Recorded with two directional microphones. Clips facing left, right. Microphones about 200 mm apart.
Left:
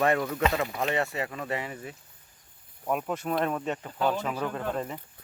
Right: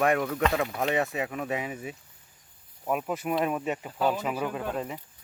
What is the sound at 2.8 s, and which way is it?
Speech, 5° right (ahead or behind).